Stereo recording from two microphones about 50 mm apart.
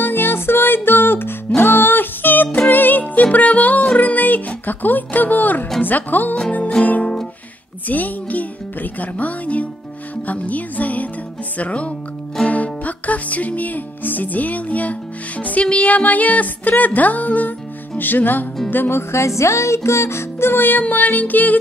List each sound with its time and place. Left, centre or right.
0.0 s music: left
11.5 s speech: left
12.4 s music: left